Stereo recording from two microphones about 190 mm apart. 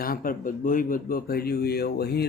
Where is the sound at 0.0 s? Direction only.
50° left (ahead or behind).